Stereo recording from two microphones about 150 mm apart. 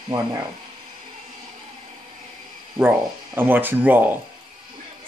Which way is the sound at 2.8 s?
15° right (ahead or behind).